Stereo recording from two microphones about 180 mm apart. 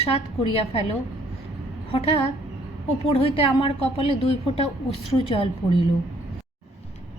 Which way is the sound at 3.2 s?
30° left (ahead or behind).